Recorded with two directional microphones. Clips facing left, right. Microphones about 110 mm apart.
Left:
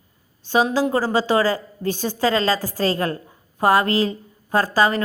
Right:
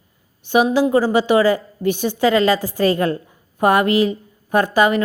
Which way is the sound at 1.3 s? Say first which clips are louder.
Right 5 dB; 35° left (ahead or behind).